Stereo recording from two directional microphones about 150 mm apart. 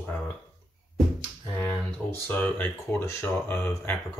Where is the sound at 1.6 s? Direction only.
15° left (ahead or behind).